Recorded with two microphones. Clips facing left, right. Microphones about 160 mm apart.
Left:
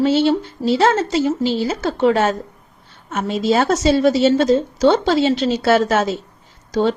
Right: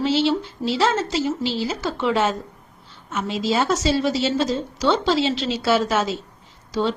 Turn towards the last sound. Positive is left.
turn(degrees=50)  # may be behind; listen again after turning